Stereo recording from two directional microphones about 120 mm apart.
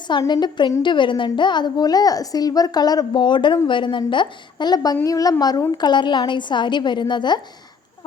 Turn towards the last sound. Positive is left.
turn(degrees=40)  # may be behind; listen again after turning